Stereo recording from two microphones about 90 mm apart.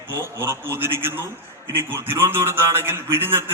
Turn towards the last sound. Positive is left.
turn(degrees=-30)  # may be behind; listen again after turning